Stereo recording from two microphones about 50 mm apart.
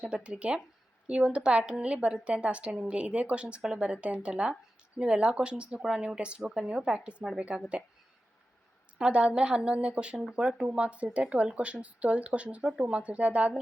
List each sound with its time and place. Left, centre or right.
0.0 s speech: right
6.4 s speech: centre
9.0 s speech: right